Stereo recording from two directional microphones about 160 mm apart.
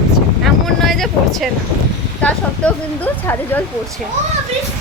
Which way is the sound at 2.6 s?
5° left (ahead or behind).